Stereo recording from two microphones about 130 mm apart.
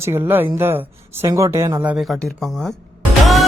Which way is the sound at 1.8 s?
10° right (ahead or behind).